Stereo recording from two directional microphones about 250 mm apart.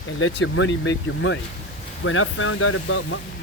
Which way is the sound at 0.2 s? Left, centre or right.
Left.